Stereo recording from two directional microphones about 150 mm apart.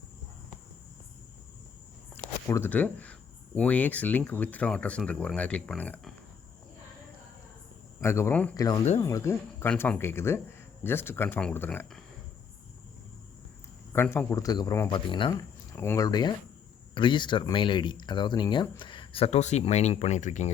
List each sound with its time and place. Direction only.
2.1 s speech: 15° left (ahead or behind)
8.0 s speech: 15° left (ahead or behind)
8.5 s speech: 25° left (ahead or behind)
13.9 s speech: 15° left (ahead or behind); by 15.3 s 35° left (ahead or behind)
15.7 s speech: 15° left (ahead or behind); by 20.5 s 50° left (ahead or behind)